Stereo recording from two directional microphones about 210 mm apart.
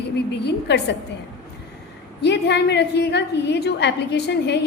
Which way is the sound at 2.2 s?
55° left (ahead or behind).